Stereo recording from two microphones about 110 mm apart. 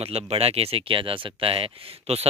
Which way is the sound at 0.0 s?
65° right (ahead or behind).